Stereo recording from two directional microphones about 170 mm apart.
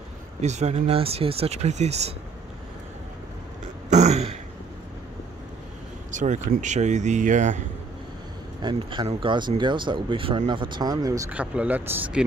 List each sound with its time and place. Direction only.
0.4 s speech: 40° right (ahead or behind)
3.9 s throat clearing: 40° right (ahead or behind)
6.1 s speech: 45° right (ahead or behind)
8.6 s speech: 25° right (ahead or behind)
11.3 s speech: 10° right (ahead or behind)